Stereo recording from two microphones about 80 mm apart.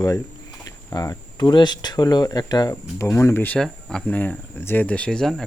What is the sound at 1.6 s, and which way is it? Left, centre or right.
Speech, left.